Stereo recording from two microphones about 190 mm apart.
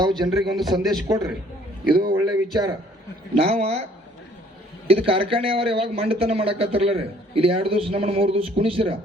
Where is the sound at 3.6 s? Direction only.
35° right (ahead or behind).